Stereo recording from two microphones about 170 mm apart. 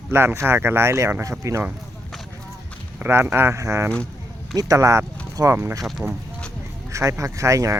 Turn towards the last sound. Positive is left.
turn(degrees=-20)  # may be behind; listen again after turning